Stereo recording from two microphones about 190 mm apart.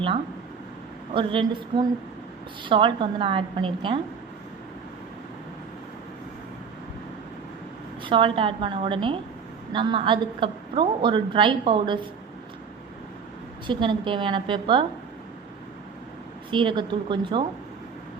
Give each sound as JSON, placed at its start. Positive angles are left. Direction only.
{"t": 1.1, "sound": "a woman's voice", "side_deg": -25}
{"t": 8.0, "sound": "a woman's voice", "side_deg": -25}
{"t": 13.7, "sound": "a woman's voice", "side_deg": -25}
{"t": 16.5, "sound": "a woman's voice", "side_deg": -25}